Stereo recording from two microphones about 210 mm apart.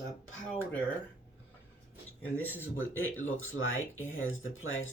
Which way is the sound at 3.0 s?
70° left (ahead or behind).